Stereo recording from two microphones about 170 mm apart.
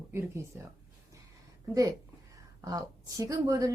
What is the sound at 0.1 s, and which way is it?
Speech, 15° right (ahead or behind).